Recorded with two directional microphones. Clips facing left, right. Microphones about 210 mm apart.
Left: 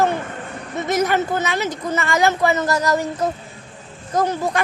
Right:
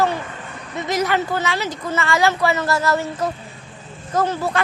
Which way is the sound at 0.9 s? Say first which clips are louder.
Left 1 dB; 20° left (ahead or behind).